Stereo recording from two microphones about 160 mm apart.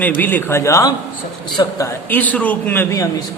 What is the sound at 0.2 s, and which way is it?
A man's voice, 10° left (ahead or behind).